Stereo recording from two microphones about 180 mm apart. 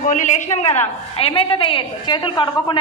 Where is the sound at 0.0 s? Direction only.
45° left (ahead or behind).